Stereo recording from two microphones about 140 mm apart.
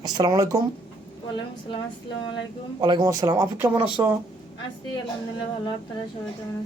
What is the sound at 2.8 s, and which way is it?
Speech, 30° right (ahead or behind).